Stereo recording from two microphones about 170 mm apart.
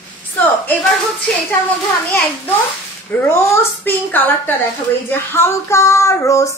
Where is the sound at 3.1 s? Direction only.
10° left (ahead or behind).